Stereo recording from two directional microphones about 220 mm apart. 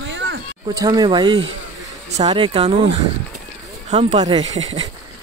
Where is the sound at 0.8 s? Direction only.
20° right (ahead or behind).